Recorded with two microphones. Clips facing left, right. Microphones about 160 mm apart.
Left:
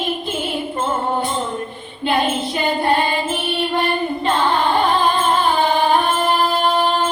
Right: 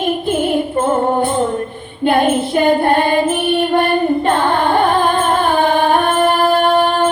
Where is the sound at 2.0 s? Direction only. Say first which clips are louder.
Right 6 dB; 55° right (ahead or behind).